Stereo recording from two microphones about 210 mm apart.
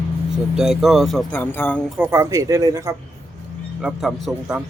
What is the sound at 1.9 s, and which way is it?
Speech, 10° right (ahead or behind).